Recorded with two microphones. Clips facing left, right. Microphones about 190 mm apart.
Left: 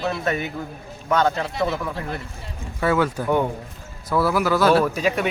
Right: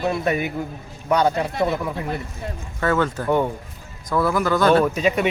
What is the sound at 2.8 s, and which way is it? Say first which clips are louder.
A man's voice: even; 10° left (ahead or behind).